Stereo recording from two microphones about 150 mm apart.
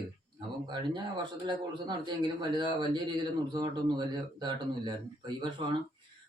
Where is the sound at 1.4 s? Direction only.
30° right (ahead or behind).